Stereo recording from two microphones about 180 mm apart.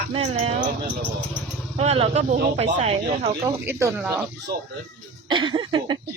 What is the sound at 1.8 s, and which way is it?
Speech, 35° right (ahead or behind).